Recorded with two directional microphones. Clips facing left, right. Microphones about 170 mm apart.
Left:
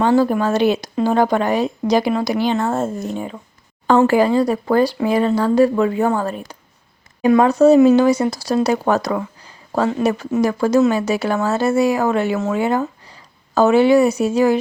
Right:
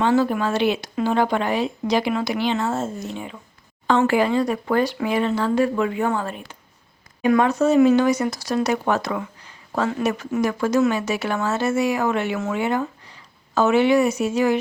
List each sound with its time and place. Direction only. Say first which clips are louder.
0.0 s speech: left 4 dB; 40° left (ahead or behind)